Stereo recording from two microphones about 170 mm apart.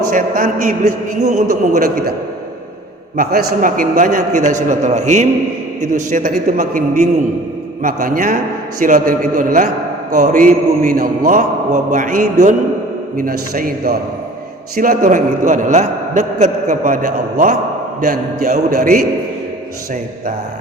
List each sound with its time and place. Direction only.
0.1 s a man's voice: 50° right (ahead or behind)
3.2 s a man's voice: 55° right (ahead or behind)